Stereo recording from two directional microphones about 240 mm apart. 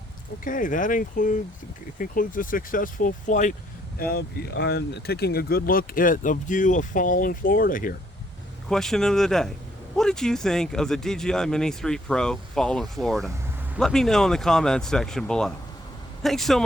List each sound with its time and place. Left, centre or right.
0.4 s speech: left
8.7 s speech: centre